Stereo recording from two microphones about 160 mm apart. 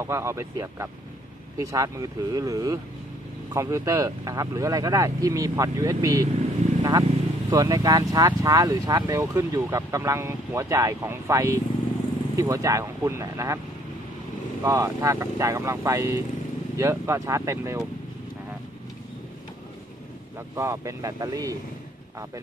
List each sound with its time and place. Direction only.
0.0 s speech: 15° right (ahead or behind)
14.6 s speech: 20° right (ahead or behind)
20.5 s speech: 15° right (ahead or behind)